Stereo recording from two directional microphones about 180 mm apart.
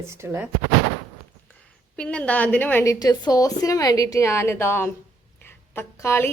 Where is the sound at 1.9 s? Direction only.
5° left (ahead or behind).